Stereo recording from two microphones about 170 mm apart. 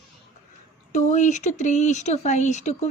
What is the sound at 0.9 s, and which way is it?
Speech, 45° left (ahead or behind).